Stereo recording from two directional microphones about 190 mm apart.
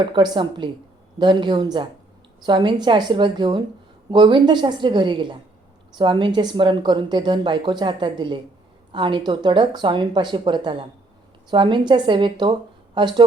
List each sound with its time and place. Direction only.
0.0 s a woman's voice: 25° right (ahead or behind)